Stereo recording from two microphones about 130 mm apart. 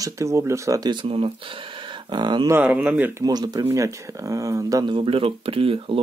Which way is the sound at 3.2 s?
30° right (ahead or behind).